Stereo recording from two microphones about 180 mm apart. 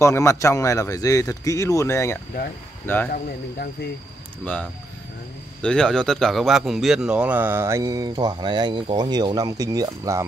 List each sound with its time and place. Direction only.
0.0 s speech: 15° left (ahead or behind)
3.1 s speech: 55° left (ahead or behind)
5.6 s speech: 5° left (ahead or behind); by 10.2 s 20° right (ahead or behind)